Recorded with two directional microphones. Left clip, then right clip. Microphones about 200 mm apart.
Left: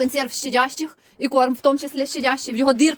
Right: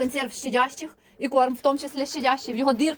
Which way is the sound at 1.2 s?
35° left (ahead or behind).